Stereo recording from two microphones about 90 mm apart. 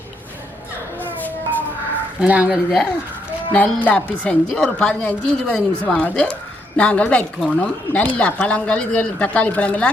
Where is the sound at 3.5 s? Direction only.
15° left (ahead or behind).